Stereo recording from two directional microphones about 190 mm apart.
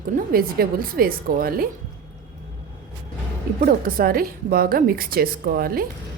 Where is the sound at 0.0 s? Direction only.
50° right (ahead or behind).